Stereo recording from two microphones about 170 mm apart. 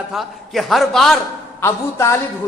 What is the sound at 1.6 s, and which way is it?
Speech, 15° left (ahead or behind).